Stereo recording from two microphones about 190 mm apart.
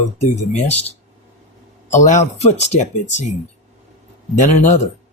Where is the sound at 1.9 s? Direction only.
40° left (ahead or behind).